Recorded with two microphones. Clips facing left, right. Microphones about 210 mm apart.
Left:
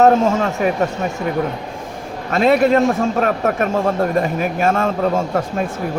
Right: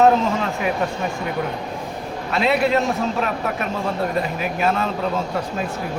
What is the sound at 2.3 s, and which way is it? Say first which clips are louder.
A man's voice: left 5 dB; 45° left (ahead or behind).